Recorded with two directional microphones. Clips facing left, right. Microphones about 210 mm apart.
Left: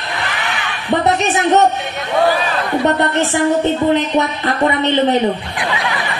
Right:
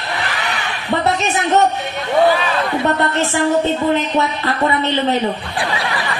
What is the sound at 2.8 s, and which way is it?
A woman's voice, 20° left (ahead or behind).